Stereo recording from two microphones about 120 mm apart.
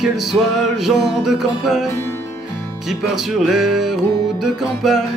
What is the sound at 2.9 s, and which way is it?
Music, centre (ahead or behind).